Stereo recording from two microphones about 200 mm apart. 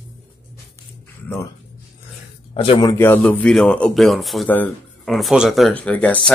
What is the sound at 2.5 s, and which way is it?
Speech, 30° left (ahead or behind).